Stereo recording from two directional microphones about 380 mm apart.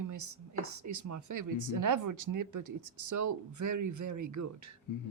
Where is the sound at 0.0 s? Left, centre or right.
Right.